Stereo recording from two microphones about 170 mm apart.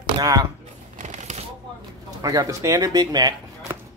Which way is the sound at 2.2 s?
20° right (ahead or behind).